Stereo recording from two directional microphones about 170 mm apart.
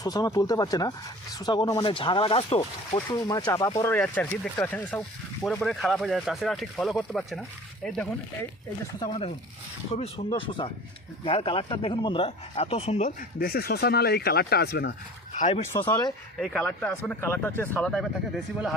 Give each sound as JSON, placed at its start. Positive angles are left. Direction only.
{"t": 0.0, "sound": "speech", "side_deg": 20}
{"t": 3.1, "sound": "speech", "side_deg": 20}
{"t": 3.9, "sound": "speech", "side_deg": 10}
{"t": 5.6, "sound": "speech", "side_deg": 0}
{"t": 9.0, "sound": "speech", "side_deg": 35}
{"t": 15.3, "sound": "speech", "side_deg": 40}
{"t": 15.8, "sound": "speech", "side_deg": 25}
{"t": 16.4, "sound": "speech", "side_deg": 0}